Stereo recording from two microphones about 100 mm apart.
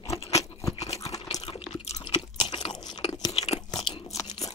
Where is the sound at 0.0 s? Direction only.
90° left.